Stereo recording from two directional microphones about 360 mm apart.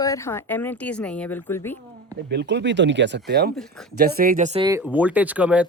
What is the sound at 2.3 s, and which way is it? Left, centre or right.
Speech, right.